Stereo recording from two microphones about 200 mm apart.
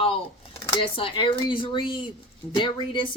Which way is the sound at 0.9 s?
25° left (ahead or behind).